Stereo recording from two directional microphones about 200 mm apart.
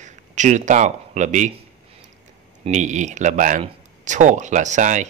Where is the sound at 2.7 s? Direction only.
35° right (ahead or behind).